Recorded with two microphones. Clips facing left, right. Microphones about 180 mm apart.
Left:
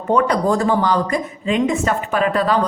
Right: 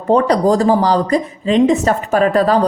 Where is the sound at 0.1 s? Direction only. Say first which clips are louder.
Right 4 dB; 35° right (ahead or behind).